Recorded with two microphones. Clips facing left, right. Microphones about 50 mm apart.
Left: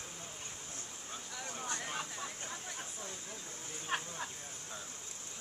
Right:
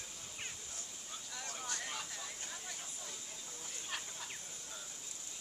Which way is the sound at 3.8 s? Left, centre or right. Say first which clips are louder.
Left 8 dB; left.